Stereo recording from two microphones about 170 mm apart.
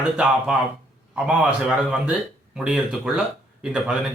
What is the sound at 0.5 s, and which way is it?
Speech, 5° right (ahead or behind).